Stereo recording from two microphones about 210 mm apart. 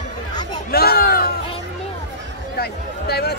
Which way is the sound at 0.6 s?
45° left (ahead or behind).